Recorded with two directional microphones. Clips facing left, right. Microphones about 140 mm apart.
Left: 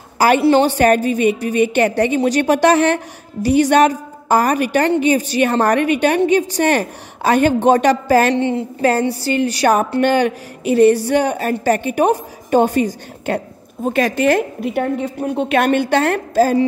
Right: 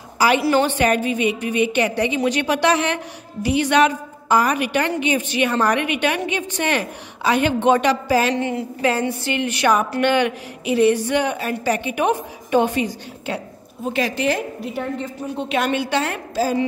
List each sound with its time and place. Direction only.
0.5 s a woman's voice: 35° left (ahead or behind); by 8.4 s 50° left (ahead or behind)
8.4 s a woman's voice: 30° left (ahead or behind)
8.8 s a woman's voice: 40° left (ahead or behind)